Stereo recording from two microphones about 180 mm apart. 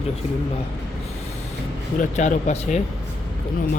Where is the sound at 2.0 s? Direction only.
45° left (ahead or behind).